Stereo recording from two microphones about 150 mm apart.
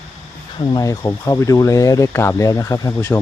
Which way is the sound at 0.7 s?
25° left (ahead or behind).